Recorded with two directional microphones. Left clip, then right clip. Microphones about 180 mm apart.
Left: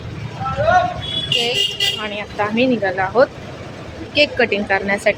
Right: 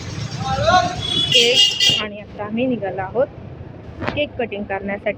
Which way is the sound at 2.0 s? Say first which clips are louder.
Left 7 dB; 10° left (ahead or behind).